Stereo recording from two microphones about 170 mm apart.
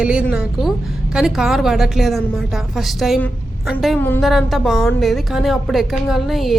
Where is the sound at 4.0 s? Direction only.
10° left (ahead or behind).